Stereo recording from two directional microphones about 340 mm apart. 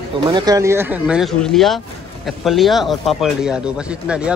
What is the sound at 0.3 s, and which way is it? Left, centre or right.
Speech, centre.